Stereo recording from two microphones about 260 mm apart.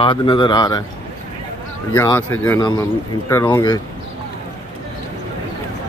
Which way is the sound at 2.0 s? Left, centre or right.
Centre.